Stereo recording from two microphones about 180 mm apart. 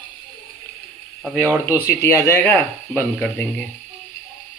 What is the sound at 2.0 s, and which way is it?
Speech, 15° left (ahead or behind).